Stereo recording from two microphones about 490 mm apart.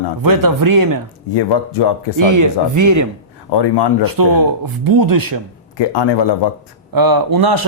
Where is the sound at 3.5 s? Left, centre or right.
Left.